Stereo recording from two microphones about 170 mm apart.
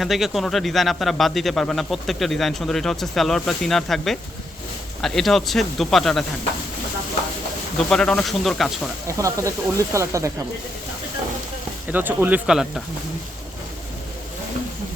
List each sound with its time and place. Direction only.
0.0 s speech: centre (ahead or behind)
7.8 s speech: 5° left (ahead or behind)
9.0 s speech: 20° right (ahead or behind)
11.9 s speech: 10° right (ahead or behind)